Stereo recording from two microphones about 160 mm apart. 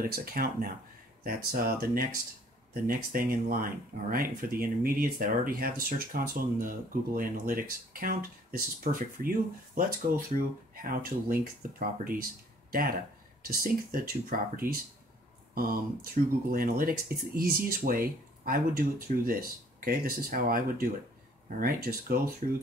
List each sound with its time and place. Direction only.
0.0 s speech: 65° right (ahead or behind)
13.5 s speech: 65° right (ahead or behind)